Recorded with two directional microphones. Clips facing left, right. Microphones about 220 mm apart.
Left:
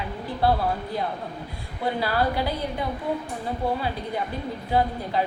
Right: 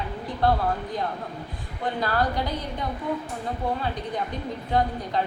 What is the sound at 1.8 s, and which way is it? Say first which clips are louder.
Speech: left 1 dB; 10° left (ahead or behind).